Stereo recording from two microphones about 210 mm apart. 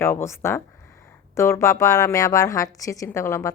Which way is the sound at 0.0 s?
10° left (ahead or behind).